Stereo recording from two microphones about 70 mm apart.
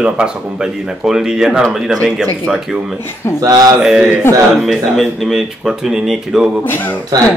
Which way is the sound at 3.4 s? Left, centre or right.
Right.